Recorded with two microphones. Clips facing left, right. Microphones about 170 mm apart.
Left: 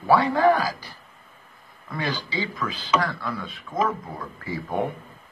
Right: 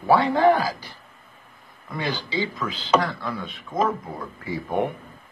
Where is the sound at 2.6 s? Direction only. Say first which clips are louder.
Right 2 dB; 20° right (ahead or behind).